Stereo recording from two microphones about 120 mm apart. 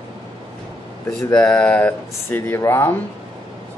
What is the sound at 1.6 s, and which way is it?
Speech, 10° left (ahead or behind).